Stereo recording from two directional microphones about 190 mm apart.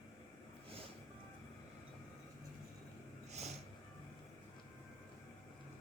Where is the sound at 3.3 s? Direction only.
35° right (ahead or behind).